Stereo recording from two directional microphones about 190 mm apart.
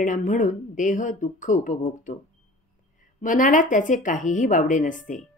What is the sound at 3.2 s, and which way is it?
A woman's voice, 45° left (ahead or behind).